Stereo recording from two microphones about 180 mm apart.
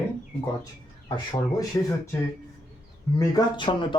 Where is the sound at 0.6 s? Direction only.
25° left (ahead or behind).